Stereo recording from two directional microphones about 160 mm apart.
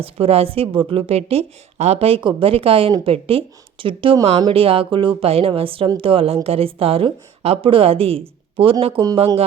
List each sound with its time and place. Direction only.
0.0 s a woman's voice: 40° right (ahead or behind)